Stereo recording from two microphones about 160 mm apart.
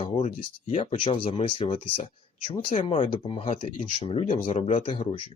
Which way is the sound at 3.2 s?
35° left (ahead or behind).